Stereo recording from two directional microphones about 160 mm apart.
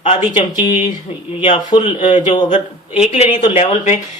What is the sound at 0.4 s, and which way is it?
Speech, 45° left (ahead or behind).